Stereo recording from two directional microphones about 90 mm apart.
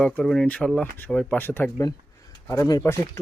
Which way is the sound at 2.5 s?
40° left (ahead or behind).